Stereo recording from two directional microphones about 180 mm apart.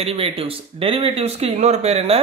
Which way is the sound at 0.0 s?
35° right (ahead or behind).